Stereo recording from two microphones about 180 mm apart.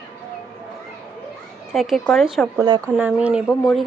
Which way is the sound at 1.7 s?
Centre (ahead or behind).